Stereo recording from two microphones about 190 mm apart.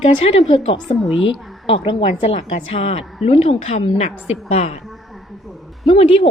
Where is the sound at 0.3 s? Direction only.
35° left (ahead or behind).